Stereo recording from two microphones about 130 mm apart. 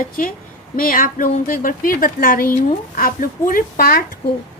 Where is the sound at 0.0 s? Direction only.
90° left.